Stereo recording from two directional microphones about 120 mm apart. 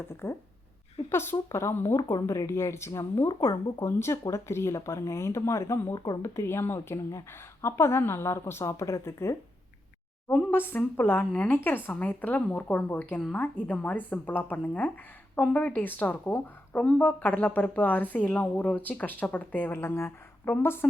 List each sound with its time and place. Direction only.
0.2 s speech: 25° left (ahead or behind)